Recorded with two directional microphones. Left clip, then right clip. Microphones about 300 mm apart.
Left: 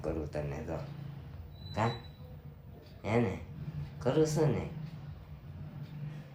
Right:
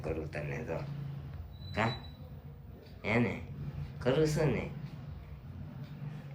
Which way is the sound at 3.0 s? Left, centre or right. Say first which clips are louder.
Even; centre.